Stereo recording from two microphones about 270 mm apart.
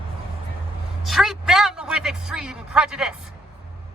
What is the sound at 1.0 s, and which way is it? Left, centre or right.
A man's voice, centre.